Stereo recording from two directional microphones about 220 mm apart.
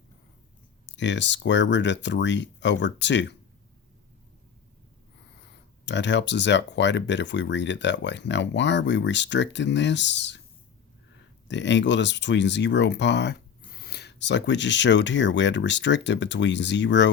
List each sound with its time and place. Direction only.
0.9 s speech: 55° left (ahead or behind)
5.8 s speech: 55° left (ahead or behind)
11.4 s speech: 55° left (ahead or behind)